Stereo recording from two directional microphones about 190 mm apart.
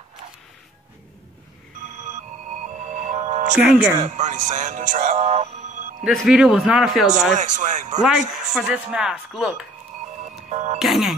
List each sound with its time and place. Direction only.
2.1 s music: 40° right (ahead or behind)
3.5 s speech: 5° right (ahead or behind)
4.0 s speech: 40° right (ahead or behind)
6.0 s speech: 5° right (ahead or behind)
7.3 s speech: 40° right (ahead or behind)
8.0 s speech: 5° right (ahead or behind)
9.9 s a sound: 45° right (ahead or behind)
10.5 s speech: 35° right (ahead or behind)
10.8 s speech: centre (ahead or behind)